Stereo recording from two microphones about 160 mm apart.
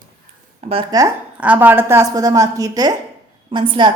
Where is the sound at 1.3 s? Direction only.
10° right (ahead or behind).